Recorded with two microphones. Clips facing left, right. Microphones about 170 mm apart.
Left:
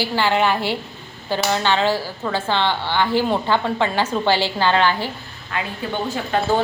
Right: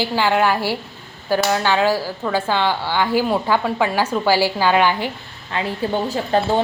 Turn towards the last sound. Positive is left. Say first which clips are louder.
# right 3 dB
turn(degrees=-35)  # may be behind; listen again after turning